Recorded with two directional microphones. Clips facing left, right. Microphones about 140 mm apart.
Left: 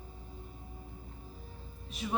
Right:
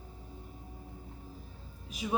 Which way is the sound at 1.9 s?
5° right (ahead or behind).